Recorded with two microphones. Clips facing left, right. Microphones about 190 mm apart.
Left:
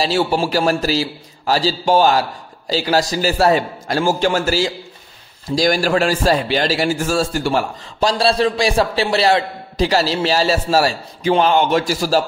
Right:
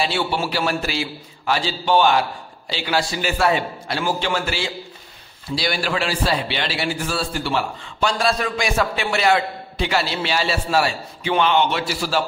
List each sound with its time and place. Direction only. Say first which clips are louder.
0.0 s a man's voice: left 5 dB; 40° left (ahead or behind)